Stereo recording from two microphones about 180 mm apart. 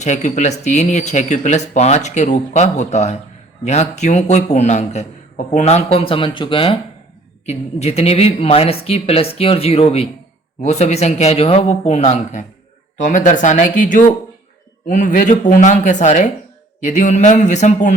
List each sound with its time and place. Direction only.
0.0 s a woman's voice: 40° left (ahead or behind)